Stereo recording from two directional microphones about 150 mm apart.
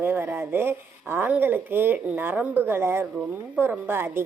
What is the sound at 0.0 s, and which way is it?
A woman's voice, 15° right (ahead or behind).